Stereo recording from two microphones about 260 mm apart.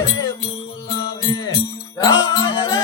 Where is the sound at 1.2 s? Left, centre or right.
Centre.